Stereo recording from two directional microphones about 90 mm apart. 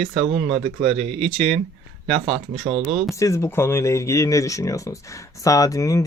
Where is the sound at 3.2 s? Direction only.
35° left (ahead or behind).